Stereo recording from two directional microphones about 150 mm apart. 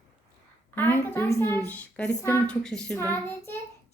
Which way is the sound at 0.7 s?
15° left (ahead or behind).